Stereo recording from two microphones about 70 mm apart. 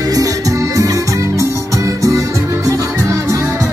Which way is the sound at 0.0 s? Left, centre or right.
Right.